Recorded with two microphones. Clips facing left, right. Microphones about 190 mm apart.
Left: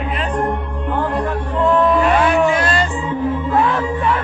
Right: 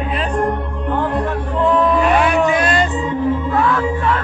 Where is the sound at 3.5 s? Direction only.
20° left (ahead or behind).